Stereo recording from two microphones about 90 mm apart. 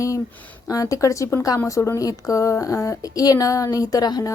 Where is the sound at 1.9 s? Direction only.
35° left (ahead or behind).